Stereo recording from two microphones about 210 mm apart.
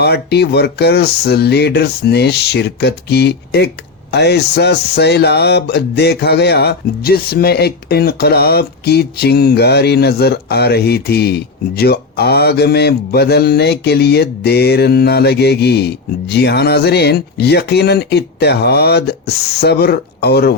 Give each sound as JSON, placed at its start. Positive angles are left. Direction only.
{"t": 0.0, "sound": "speech", "side_deg": 50}